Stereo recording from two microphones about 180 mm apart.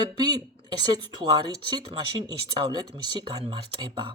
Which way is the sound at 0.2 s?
20° right (ahead or behind).